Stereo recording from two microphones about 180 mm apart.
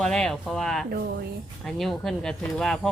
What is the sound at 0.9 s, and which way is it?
Speech, 60° right (ahead or behind).